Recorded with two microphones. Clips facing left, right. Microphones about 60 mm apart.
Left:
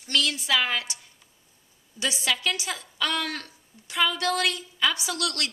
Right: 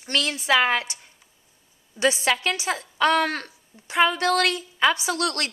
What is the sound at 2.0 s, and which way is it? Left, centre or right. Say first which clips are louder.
A woman's voice: right 6 dB; right.